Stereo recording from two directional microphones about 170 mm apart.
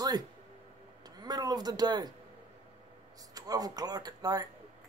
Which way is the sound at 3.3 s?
20° right (ahead or behind).